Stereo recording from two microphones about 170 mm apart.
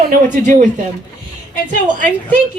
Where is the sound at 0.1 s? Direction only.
50° right (ahead or behind).